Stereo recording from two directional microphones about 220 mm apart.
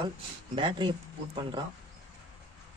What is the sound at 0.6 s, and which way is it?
Speech, 20° right (ahead or behind).